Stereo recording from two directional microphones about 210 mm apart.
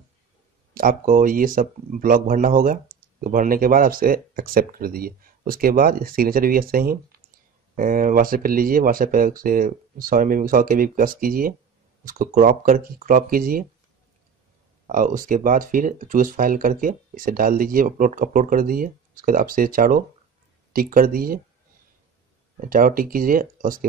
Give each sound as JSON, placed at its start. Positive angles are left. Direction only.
{"t": 0.7, "sound": "speech", "side_deg": -40}
{"t": 14.9, "sound": "speech", "side_deg": -40}
{"t": 22.7, "sound": "speech", "side_deg": -40}